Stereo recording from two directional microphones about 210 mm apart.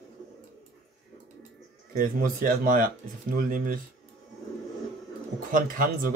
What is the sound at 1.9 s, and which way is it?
Speech, 45° right (ahead or behind).